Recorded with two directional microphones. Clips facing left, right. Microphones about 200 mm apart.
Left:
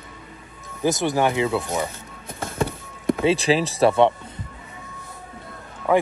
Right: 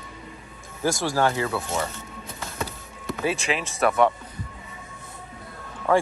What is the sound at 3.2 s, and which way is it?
Speech, 35° left (ahead or behind).